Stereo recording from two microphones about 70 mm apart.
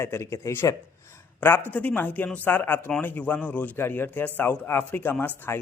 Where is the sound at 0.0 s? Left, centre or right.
Left.